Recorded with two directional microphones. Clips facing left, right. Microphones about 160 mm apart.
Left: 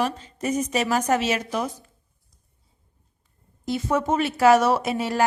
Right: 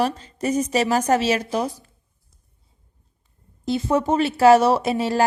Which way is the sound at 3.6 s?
30° right (ahead or behind).